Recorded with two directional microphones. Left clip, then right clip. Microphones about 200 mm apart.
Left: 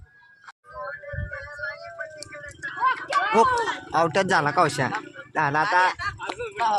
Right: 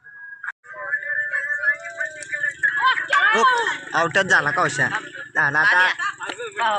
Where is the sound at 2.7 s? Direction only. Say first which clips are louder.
Right 2 dB; 55° left (ahead or behind).